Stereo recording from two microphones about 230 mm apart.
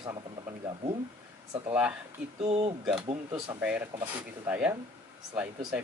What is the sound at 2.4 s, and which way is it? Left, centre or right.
Speech, right.